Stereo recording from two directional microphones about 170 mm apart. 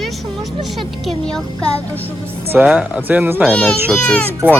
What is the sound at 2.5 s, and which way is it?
Speech, 10° right (ahead or behind).